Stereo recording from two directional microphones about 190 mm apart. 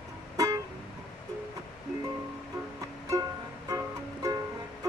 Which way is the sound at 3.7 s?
20° right (ahead or behind).